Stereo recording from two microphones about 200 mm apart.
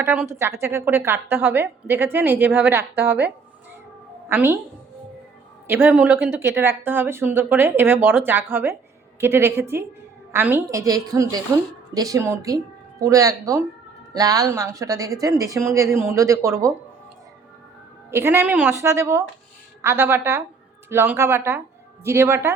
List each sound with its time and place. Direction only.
0.0 s speech: 10° right (ahead or behind)
5.6 s speech: 10° right (ahead or behind)
18.1 s speech: 10° right (ahead or behind)